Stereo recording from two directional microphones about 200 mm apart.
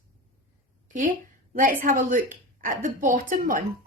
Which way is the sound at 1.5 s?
45° right (ahead or behind).